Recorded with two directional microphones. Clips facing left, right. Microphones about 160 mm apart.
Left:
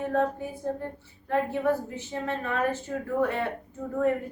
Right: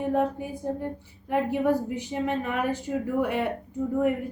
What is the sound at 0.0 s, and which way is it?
A woman's voice, 15° right (ahead or behind).